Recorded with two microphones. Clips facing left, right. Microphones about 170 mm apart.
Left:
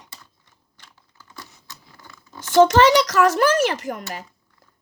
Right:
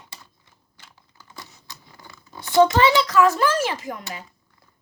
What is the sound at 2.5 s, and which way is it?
A child's voice, 85° left.